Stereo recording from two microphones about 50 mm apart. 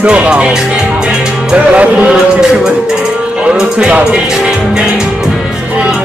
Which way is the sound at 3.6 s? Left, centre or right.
Centre.